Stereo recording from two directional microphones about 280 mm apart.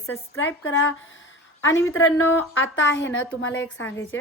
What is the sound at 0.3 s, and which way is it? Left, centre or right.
A woman's voice, left.